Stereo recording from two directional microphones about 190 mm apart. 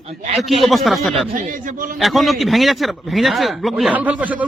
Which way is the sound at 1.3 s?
45° right (ahead or behind).